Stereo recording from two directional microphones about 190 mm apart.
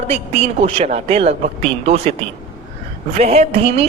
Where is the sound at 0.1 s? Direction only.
35° right (ahead or behind).